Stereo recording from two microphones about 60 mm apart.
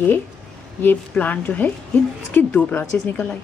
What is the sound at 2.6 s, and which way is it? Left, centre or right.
Speech, left.